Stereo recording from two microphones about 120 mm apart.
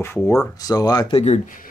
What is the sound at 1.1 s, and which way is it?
Speech, 70° left (ahead or behind).